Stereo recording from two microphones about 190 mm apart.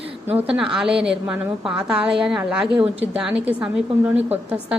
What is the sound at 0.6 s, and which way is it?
A woman's voice, 5° right (ahead or behind).